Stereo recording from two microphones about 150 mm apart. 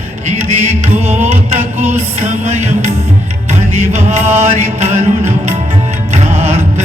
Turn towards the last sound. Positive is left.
turn(degrees=-45)  # may be behind; listen again after turning